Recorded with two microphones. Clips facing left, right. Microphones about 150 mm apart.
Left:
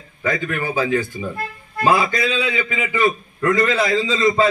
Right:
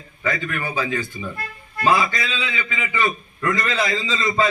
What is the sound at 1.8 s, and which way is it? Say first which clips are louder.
Music: left 2 dB; 15° left (ahead or behind).